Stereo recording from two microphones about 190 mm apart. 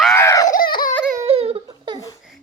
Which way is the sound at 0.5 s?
50° left (ahead or behind).